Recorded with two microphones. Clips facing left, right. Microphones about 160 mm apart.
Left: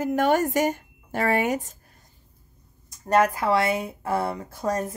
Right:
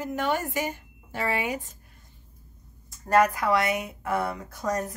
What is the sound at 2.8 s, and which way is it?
A woman's voice, 20° left (ahead or behind).